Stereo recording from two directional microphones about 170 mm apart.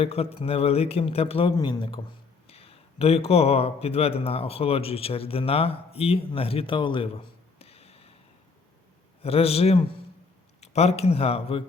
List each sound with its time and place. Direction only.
0.0 s a man's voice: 35° left (ahead or behind)
9.2 s a man's voice: 35° left (ahead or behind)